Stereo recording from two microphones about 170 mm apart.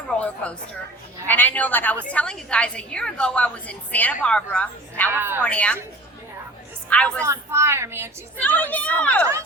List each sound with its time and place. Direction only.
0.2 s a woman's voice: 5° left (ahead or behind)
5.1 s a woman's voice: 15° right (ahead or behind)
5.4 s a woman's voice: 5° left (ahead or behind)
6.9 s a woman's voice: 5° left (ahead or behind)
7.2 s a woman's voice: 15° right (ahead or behind)
8.4 s a woman's voice: 10° left (ahead or behind)